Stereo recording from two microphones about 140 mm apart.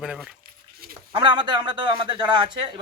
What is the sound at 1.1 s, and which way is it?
Speech, 35° right (ahead or behind).